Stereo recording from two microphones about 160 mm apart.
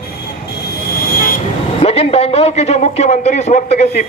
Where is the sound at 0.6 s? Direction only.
70° left (ahead or behind).